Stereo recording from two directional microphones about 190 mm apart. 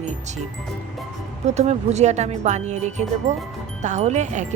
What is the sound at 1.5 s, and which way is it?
Speech, 35° right (ahead or behind).